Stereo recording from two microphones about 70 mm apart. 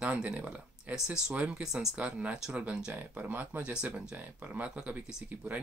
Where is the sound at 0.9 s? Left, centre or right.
Centre.